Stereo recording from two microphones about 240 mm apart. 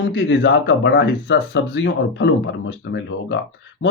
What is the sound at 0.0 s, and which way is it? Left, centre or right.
Speech, left.